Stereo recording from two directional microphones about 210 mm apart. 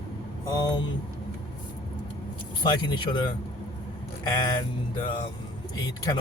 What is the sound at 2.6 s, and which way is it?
Speech, 20° left (ahead or behind).